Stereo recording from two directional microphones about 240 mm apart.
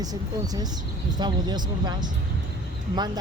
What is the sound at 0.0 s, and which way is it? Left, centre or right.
Speech, centre.